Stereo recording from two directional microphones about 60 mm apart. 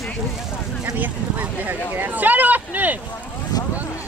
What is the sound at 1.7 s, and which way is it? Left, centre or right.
Speech, right.